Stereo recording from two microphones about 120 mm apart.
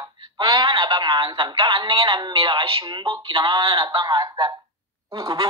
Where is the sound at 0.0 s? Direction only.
30° right (ahead or behind).